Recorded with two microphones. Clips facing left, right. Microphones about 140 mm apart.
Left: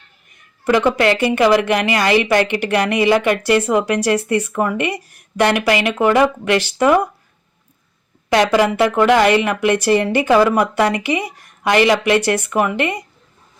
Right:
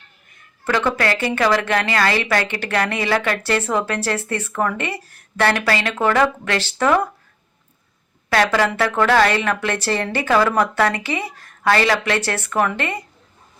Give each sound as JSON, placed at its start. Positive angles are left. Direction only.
{"t": 0.6, "sound": "a woman's voice", "side_deg": 15}
{"t": 8.3, "sound": "a woman's voice", "side_deg": 15}